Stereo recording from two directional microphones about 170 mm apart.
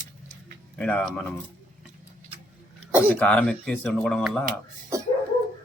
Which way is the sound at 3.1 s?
5° left (ahead or behind).